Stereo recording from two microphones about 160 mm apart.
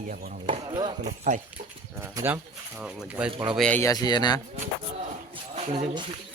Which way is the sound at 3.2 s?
35° right (ahead or behind).